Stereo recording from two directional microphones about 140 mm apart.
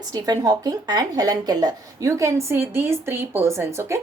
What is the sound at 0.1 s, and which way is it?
A woman's voice, 25° right (ahead or behind).